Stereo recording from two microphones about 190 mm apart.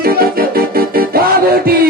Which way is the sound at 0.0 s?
50° right (ahead or behind).